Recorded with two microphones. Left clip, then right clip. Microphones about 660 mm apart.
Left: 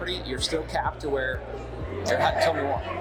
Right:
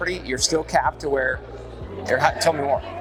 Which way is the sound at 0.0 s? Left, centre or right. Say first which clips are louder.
Right 6 dB; right.